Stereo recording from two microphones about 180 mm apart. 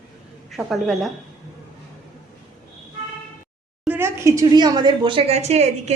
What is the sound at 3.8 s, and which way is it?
A woman's voice, 10° right (ahead or behind).